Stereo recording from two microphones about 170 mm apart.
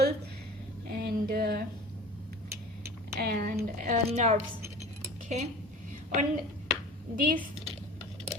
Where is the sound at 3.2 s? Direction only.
60° right (ahead or behind).